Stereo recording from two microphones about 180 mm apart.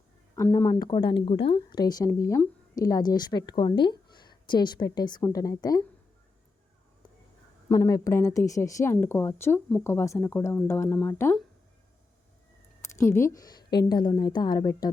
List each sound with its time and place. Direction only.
0.3 s speech: 15° left (ahead or behind)
7.7 s speech: 20° left (ahead or behind)
13.0 s speech: 15° left (ahead or behind)